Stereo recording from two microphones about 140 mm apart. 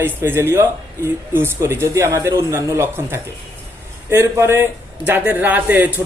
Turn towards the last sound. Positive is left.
turn(degrees=-10)  # may be behind; listen again after turning